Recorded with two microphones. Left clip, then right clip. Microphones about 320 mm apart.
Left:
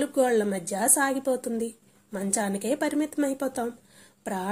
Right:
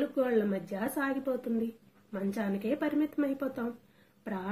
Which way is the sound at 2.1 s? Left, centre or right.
Left.